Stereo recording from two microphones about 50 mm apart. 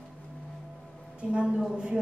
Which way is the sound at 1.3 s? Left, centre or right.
Centre.